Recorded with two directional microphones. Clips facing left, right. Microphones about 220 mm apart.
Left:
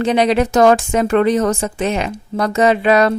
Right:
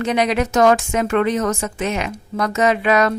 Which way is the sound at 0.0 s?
30° left (ahead or behind).